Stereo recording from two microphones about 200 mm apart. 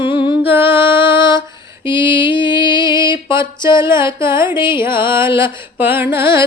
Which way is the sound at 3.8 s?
10° right (ahead or behind).